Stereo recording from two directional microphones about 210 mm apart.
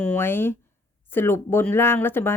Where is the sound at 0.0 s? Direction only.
10° left (ahead or behind).